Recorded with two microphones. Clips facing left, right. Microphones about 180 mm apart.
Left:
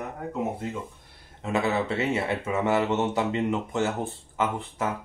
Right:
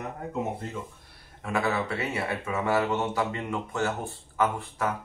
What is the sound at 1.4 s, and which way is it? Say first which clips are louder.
Speech: left 2 dB; 20° left (ahead or behind).